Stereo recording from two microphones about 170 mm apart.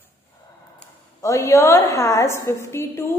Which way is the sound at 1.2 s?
20° left (ahead or behind).